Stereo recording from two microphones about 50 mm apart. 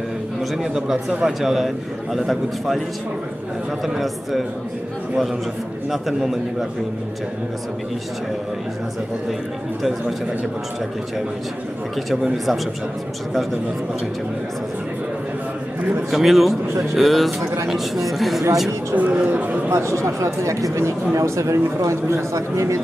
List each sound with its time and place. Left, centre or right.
0.6 s speech: centre
3.8 s speech: centre
5.9 s speech: centre
12.1 s speech: centre
16.1 s speech: centre
18.9 s speech: right
19.7 s speech: right